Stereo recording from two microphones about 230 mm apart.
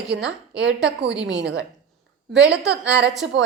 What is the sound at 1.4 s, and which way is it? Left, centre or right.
A woman's voice, right.